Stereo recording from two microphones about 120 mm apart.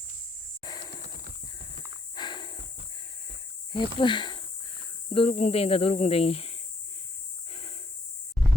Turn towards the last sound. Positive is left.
turn(degrees=50)  # may be behind; listen again after turning